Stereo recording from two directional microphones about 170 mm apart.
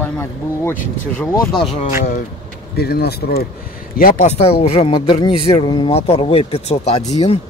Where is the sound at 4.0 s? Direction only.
55° left (ahead or behind).